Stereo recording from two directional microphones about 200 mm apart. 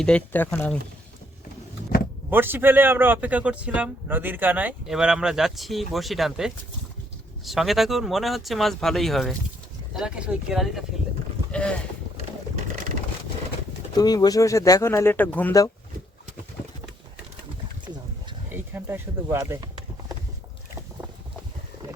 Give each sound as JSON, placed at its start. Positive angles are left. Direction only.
{"t": 0.0, "sound": "speech", "side_deg": 5}
{"t": 2.3, "sound": "speech", "side_deg": -10}
{"t": 13.9, "sound": "speech", "side_deg": 20}
{"t": 18.4, "sound": "a sound", "side_deg": -10}